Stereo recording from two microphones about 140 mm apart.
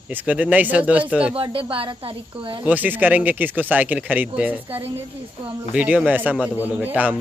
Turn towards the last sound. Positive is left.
turn(degrees=-10)  # may be behind; listen again after turning